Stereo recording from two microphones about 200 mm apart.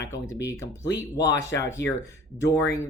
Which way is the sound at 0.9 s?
15° left (ahead or behind).